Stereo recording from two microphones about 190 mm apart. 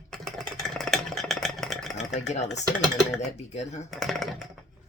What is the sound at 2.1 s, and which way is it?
Speech, 40° left (ahead or behind).